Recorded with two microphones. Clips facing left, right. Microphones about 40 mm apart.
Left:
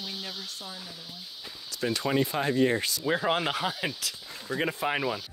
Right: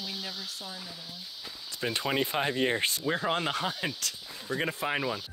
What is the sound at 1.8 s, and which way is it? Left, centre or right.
Speech, centre.